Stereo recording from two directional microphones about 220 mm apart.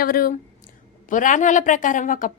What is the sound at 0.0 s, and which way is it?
A woman's voice, 40° left (ahead or behind).